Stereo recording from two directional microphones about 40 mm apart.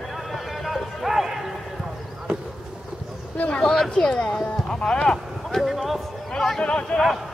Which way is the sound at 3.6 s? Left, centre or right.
Centre.